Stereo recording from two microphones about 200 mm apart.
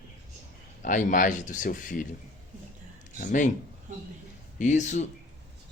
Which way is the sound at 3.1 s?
40° left (ahead or behind).